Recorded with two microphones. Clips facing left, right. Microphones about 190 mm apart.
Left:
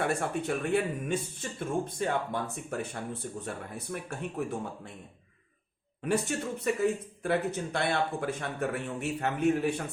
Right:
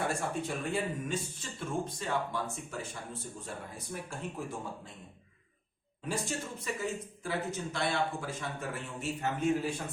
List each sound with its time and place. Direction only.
0.1 s speech: 60° left (ahead or behind)
6.0 s speech: 60° left (ahead or behind)